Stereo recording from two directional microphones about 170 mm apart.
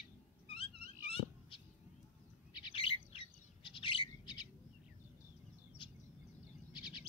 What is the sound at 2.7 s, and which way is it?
Bird, 30° left (ahead or behind).